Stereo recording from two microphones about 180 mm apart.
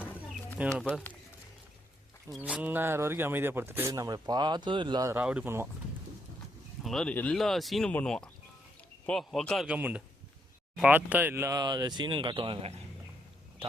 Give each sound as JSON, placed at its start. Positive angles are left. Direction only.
{"t": 0.8, "sound": "speech", "side_deg": 5}
{"t": 2.4, "sound": "speech", "side_deg": -10}
{"t": 5.1, "sound": "speech", "side_deg": -5}
{"t": 6.8, "sound": "speech", "side_deg": 5}